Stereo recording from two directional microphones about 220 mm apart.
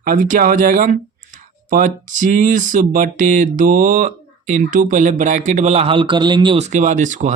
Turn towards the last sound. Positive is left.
turn(degrees=-35)  # may be behind; listen again after turning